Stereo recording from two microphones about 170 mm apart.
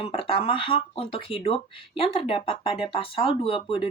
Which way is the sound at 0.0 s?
35° left (ahead or behind).